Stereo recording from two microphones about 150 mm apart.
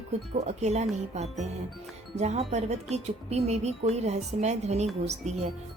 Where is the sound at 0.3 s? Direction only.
50° right (ahead or behind).